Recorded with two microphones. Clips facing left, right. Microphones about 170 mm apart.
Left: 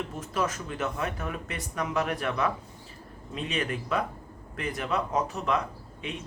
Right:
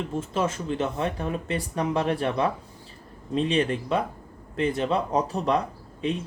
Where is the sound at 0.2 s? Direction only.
25° right (ahead or behind).